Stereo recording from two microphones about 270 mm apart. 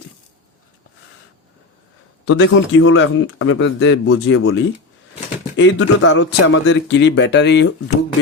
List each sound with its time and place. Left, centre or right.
2.2 s a man's voice: left